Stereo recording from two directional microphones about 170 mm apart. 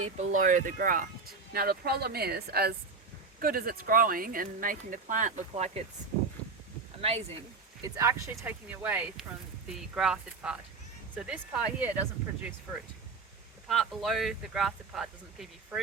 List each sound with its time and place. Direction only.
0.0 s speech: 45° right (ahead or behind)
7.0 s speech: 35° right (ahead or behind)
7.9 s speech: 15° right (ahead or behind)